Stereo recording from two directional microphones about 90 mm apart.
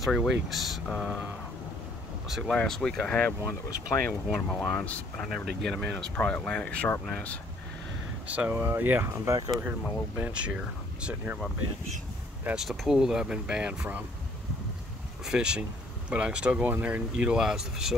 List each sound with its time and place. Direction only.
0.0 s speech: centre (ahead or behind)
2.2 s speech: 5° right (ahead or behind); by 3.3 s 15° left (ahead or behind)
3.4 s speech: 35° left (ahead or behind)
4.6 s speech: 15° left (ahead or behind)
8.3 s speech: 20° right (ahead or behind)
9.6 s speech: 20° right (ahead or behind)
12.5 s speech: 5° right (ahead or behind)
15.2 s speech: 10° right (ahead or behind)